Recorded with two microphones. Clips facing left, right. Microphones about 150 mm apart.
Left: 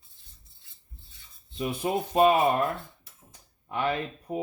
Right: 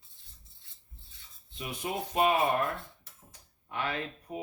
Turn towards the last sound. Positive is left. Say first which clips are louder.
# left 6 dB
turn(degrees=30)  # may be behind; listen again after turning